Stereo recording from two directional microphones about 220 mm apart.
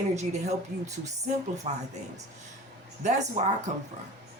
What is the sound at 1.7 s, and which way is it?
Speech, 30° right (ahead or behind).